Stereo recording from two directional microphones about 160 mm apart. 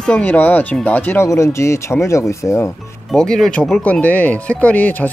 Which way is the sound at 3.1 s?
5° left (ahead or behind).